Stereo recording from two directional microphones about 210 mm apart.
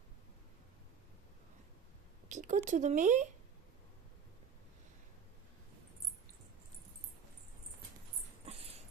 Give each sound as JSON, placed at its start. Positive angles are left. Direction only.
{"t": 2.3, "sound": "speech", "side_deg": -40}
{"t": 8.4, "sound": "dog", "side_deg": -30}